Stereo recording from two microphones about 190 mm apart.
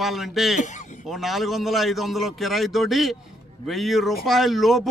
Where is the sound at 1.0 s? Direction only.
Centre (ahead or behind).